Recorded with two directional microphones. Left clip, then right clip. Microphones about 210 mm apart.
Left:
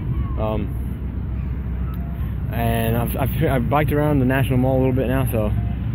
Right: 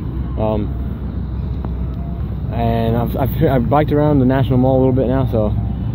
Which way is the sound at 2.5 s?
Centre (ahead or behind).